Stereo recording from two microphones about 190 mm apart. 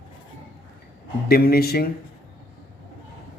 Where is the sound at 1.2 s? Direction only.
55° left (ahead or behind).